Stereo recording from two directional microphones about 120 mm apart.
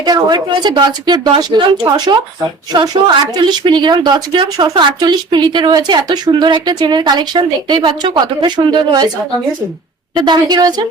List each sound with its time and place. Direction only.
0.0 s speech: 35° right (ahead or behind)
3.3 s speech: 40° right (ahead or behind)
10.2 s speech: 35° right (ahead or behind)